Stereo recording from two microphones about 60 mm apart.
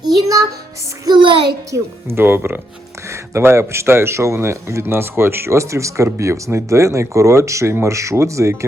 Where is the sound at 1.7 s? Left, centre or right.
Right.